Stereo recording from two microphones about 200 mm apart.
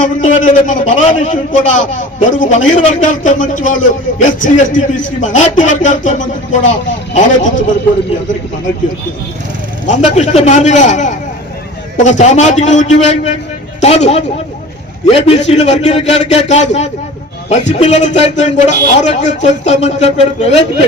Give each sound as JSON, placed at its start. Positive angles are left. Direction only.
{"t": 0.0, "sound": "a man's voice", "side_deg": 40}
{"t": 9.8, "sound": "a man's voice", "side_deg": 35}